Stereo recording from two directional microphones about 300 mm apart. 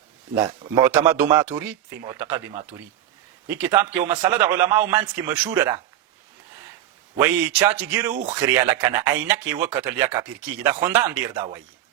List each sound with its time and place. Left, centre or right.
0.3 s a man's voice: centre
7.2 s a man's voice: centre
8.1 s speech: right
8.5 s a man's voice: centre